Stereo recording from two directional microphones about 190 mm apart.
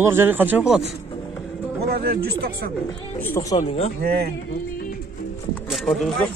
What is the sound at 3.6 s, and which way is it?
Speech, 30° left (ahead or behind).